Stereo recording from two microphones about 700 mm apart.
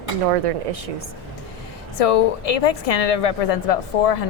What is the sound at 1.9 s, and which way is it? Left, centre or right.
A woman's voice, left.